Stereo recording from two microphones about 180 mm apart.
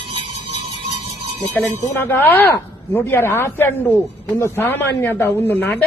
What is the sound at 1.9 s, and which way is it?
A woman's voice, 10° left (ahead or behind).